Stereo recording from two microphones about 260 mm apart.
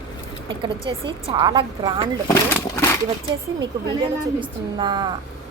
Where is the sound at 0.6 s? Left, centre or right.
Centre.